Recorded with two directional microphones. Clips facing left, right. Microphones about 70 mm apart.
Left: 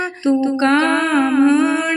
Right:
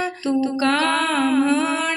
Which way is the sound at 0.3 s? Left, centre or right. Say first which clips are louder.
Left 5 dB; left.